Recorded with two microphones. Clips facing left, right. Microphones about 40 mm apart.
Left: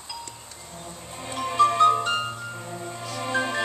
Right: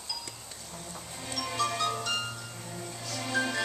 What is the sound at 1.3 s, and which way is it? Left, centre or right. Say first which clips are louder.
Music: left 10 dB; left.